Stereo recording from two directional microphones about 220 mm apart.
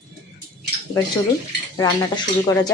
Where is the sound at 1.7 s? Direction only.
20° left (ahead or behind).